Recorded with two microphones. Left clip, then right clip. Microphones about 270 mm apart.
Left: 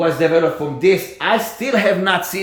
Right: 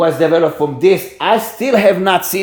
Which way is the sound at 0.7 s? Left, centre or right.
Right.